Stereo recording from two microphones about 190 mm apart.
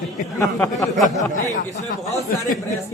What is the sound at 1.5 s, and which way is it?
Speech, 40° left (ahead or behind).